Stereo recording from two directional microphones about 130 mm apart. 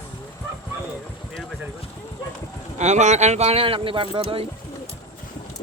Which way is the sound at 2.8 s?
65° right (ahead or behind).